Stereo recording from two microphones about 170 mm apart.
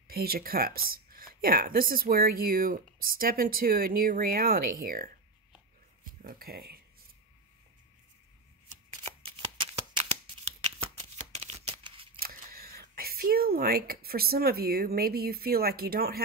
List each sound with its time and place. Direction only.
0.1 s speech: 60° right (ahead or behind)
6.2 s speech: 60° right (ahead or behind)
9.0 s shuffling cards: 30° right (ahead or behind)
12.2 s speech: 60° right (ahead or behind)